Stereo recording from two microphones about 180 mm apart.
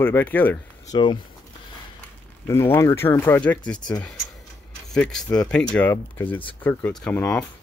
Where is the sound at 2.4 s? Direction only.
15° left (ahead or behind).